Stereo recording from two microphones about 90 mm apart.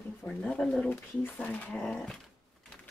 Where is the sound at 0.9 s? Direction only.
20° left (ahead or behind).